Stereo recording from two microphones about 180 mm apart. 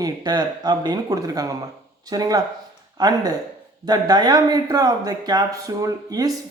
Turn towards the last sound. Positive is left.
turn(degrees=-20)  # may be behind; listen again after turning